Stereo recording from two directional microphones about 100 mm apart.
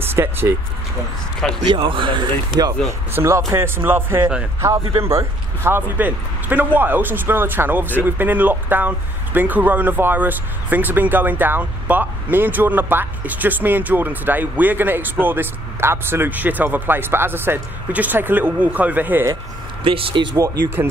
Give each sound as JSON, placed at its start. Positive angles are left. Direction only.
{"t": 0.1, "sound": "speech", "side_deg": -25}
{"t": 1.7, "sound": "speech", "side_deg": -55}
{"t": 2.9, "sound": "a man's voice", "side_deg": -25}
{"t": 19.8, "sound": "speech", "side_deg": -65}
{"t": 20.3, "sound": "speech", "side_deg": -35}